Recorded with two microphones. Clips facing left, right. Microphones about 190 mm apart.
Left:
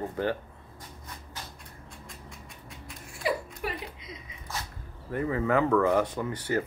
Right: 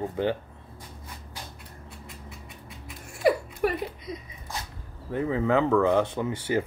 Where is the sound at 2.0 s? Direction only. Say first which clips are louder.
Right 2 dB; centre (ahead or behind).